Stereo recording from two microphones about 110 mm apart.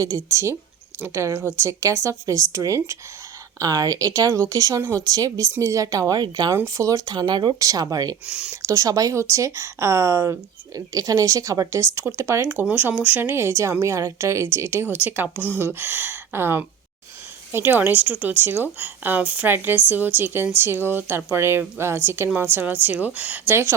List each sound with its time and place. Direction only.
0.0 s speech: 25° right (ahead or behind); by 7.5 s 45° right (ahead or behind)
7.6 s speech: 30° right (ahead or behind)
8.3 s a woman's voice: 10° right (ahead or behind)
8.6 s a woman's voice: 30° right (ahead or behind)